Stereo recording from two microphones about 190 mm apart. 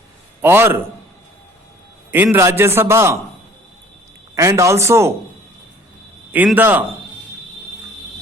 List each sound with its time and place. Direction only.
0.4 s a man's voice: 10° right (ahead or behind)
2.0 s a man's voice: 10° right (ahead or behind)
4.4 s a man's voice: 15° right (ahead or behind)
6.3 s a man's voice: 10° right (ahead or behind)